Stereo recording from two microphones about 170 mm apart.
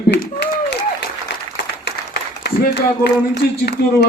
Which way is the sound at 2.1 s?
75° left (ahead or behind).